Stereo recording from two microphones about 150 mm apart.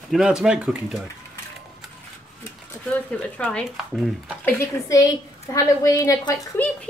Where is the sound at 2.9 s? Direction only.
10° left (ahead or behind).